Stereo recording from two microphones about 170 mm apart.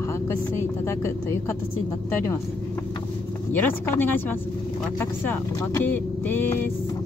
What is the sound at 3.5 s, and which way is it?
Speech, 10° left (ahead or behind).